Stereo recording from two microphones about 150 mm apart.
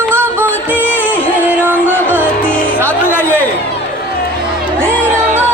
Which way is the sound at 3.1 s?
15° left (ahead or behind).